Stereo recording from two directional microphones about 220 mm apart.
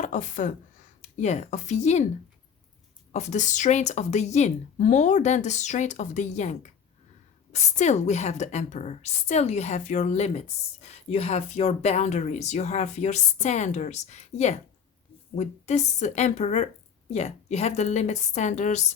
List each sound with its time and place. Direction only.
0.0 s a woman's voice: 35° left (ahead or behind)
3.1 s a woman's voice: 30° left (ahead or behind)